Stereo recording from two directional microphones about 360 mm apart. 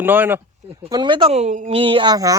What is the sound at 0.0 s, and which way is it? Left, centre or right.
A man's voice, centre.